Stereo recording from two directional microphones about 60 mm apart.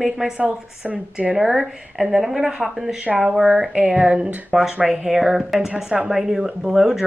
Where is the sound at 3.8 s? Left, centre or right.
Right; by 7.0 s centre.